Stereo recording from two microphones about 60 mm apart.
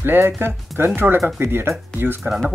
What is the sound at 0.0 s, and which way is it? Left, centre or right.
Speech, right.